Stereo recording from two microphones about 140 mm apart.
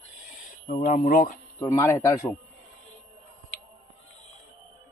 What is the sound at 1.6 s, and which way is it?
Speech, 20° left (ahead or behind).